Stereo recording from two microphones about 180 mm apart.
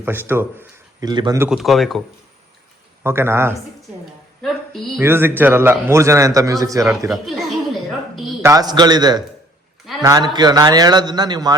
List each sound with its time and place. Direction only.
0.0 s a man's voice: 10° right (ahead or behind)
1.0 s a man's voice: 25° right (ahead or behind)
1.4 s speech: 5° right (ahead or behind)
3.0 s a man's voice: 15° right (ahead or behind)
4.9 s a man's voice: 10° right (ahead or behind)
7.3 s a sound: centre (ahead or behind)
8.4 s a man's voice: 20° right (ahead or behind)